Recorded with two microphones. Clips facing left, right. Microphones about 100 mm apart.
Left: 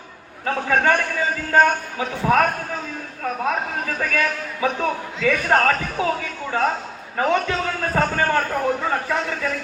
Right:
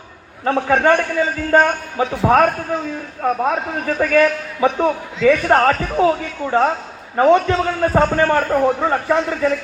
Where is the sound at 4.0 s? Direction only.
30° right (ahead or behind).